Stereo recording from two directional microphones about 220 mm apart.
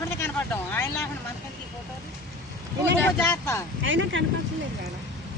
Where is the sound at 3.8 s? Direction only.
60° right (ahead or behind).